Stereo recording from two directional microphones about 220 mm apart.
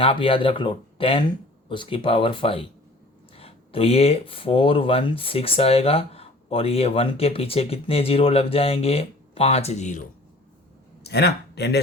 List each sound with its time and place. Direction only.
0.0 s speech: 25° left (ahead or behind)
11.0 s speech: 50° left (ahead or behind)